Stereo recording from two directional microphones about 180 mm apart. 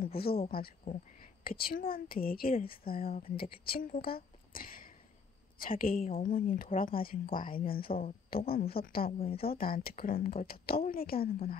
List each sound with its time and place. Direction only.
0.0 s a woman's voice: 55° left (ahead or behind)